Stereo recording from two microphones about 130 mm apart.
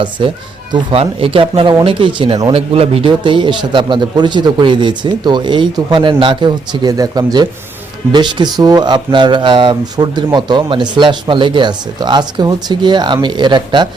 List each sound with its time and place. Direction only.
0.2 s a man's voice: 45° right (ahead or behind)